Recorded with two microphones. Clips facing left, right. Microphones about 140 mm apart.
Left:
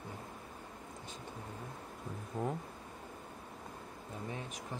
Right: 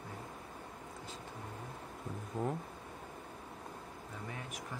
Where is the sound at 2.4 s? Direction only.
Centre (ahead or behind).